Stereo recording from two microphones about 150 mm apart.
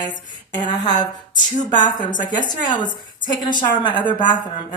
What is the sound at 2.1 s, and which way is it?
Speech, 60° left (ahead or behind).